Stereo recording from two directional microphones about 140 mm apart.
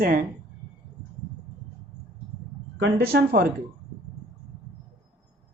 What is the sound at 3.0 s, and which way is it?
Speech, 90° right.